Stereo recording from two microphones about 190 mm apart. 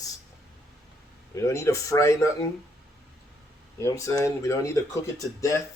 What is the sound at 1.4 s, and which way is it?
Speech, 15° left (ahead or behind).